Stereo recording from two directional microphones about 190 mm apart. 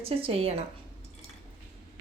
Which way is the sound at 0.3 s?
30° right (ahead or behind).